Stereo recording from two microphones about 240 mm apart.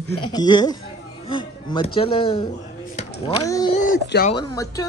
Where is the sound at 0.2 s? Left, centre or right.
Centre.